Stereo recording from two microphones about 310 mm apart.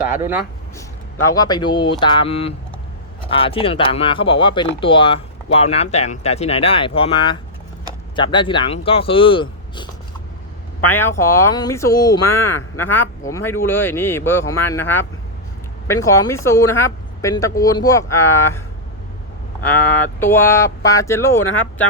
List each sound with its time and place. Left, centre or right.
0.2 s speech: centre
1.3 s speech: centre
19.8 s speech: centre